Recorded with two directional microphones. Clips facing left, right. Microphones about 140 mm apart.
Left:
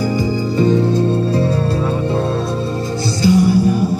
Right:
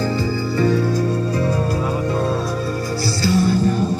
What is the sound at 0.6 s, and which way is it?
Music, 20° left (ahead or behind).